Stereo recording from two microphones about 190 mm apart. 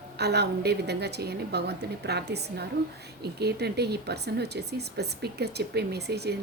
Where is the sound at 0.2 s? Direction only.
60° right (ahead or behind).